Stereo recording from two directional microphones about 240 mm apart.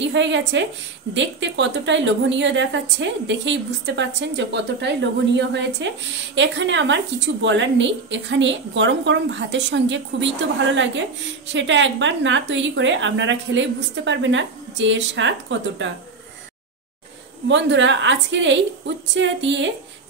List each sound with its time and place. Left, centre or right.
0.0 s a woman's voice: right
17.5 s a woman's voice: right